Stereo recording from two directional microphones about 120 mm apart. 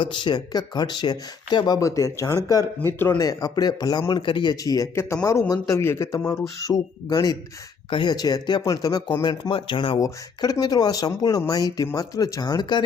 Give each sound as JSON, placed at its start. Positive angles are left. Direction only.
{"t": 0.0, "sound": "speech", "side_deg": 40}
{"t": 2.8, "sound": "speech", "side_deg": 20}
{"t": 3.2, "sound": "speech", "side_deg": 30}
{"t": 9.5, "sound": "speech", "side_deg": 45}
{"t": 10.0, "sound": "speech", "side_deg": 30}